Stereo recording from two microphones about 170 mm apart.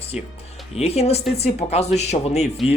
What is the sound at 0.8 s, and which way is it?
Speech, 35° left (ahead or behind).